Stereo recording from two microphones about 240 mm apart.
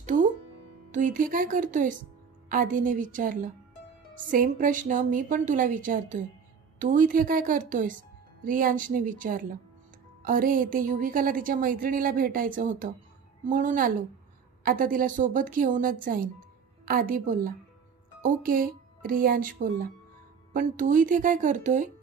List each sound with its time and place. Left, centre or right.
0.0 s music: right
0.9 s a woman's voice: right